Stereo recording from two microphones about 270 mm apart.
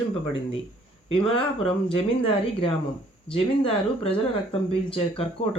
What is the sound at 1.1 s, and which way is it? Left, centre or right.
Speech, centre.